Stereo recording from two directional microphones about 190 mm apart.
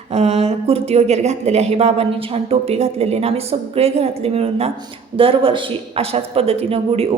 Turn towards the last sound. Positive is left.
turn(degrees=-30)  # may be behind; listen again after turning